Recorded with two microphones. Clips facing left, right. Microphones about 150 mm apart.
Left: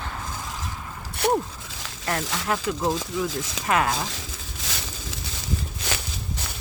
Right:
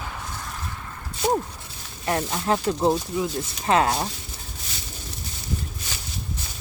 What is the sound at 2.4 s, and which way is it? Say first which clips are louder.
Speech: right 4 dB; 30° right (ahead or behind).